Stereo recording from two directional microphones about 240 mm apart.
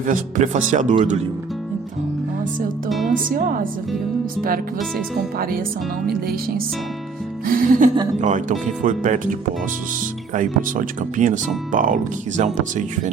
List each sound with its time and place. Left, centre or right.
0.0 s speech: right
3.1 s speech: right
7.4 s speech: right
10.3 s speech: right